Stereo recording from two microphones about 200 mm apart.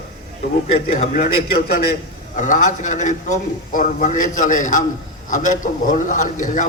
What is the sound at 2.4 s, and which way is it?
A man's voice, 40° left (ahead or behind).